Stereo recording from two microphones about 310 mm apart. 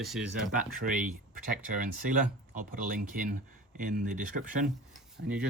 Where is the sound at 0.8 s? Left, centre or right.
Right.